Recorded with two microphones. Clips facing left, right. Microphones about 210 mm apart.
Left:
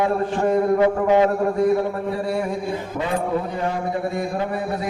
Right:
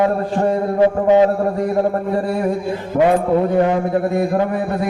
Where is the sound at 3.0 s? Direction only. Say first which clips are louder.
Right 10 dB; 60° right (ahead or behind).